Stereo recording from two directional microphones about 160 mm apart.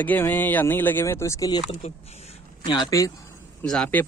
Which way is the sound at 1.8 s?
40° left (ahead or behind).